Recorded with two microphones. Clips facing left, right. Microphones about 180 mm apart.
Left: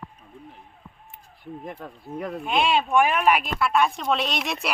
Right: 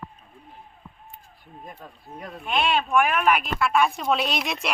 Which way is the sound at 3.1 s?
5° left (ahead or behind).